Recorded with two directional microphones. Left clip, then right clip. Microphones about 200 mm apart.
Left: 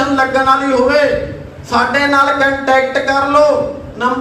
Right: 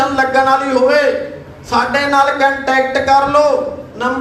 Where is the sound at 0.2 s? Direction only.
40° right (ahead or behind).